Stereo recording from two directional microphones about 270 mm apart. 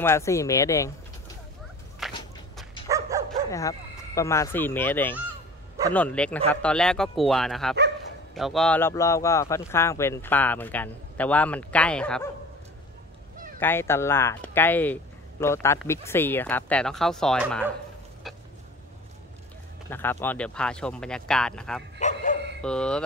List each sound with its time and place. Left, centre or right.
0.0 s speech: centre
2.0 s walk: centre
2.9 s dog: centre
3.4 s speech: centre
13.6 s speech: centre
19.9 s speech: centre
22.0 s bow-wow: left
22.6 s speech: centre